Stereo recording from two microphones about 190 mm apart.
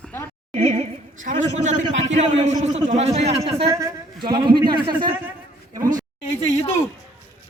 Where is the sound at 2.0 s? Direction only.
35° right (ahead or behind).